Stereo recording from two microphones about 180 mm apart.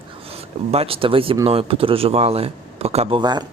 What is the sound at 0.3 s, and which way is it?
Speech, 35° right (ahead or behind).